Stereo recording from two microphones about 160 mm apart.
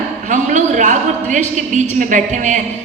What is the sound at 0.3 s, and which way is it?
A man's voice, 50° right (ahead or behind).